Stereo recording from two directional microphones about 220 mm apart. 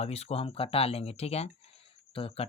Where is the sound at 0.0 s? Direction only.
30° left (ahead or behind).